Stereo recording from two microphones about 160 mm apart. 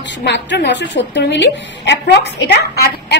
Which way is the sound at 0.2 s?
90° left.